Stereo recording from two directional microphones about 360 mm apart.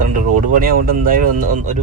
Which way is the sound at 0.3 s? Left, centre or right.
Right.